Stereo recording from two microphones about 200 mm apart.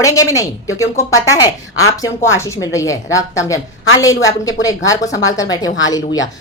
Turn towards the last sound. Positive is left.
turn(degrees=70)  # may be behind; listen again after turning